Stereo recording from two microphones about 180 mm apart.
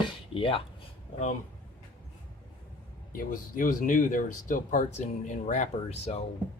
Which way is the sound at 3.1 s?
50° left (ahead or behind).